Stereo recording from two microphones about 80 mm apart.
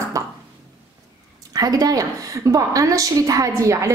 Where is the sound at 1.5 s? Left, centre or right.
Right.